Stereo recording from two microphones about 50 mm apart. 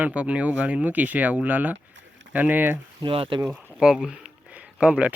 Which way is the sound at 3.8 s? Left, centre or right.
Centre.